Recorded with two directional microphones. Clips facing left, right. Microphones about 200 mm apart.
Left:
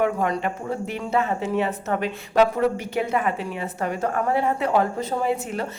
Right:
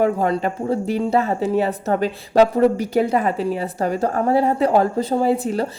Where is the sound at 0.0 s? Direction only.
35° right (ahead or behind).